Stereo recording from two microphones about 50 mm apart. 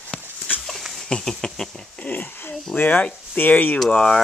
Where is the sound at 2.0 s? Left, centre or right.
Left.